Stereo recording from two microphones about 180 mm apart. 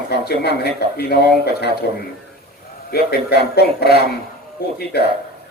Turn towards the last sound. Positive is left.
turn(degrees=65)  # may be behind; listen again after turning